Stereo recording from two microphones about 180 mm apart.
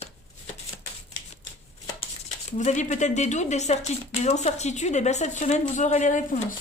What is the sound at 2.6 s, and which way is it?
A woman's voice, 40° left (ahead or behind).